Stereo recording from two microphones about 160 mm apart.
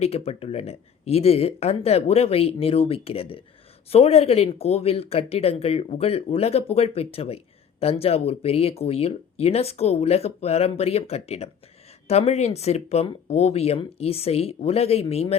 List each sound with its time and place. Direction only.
0.0 s speech: 40° left (ahead or behind)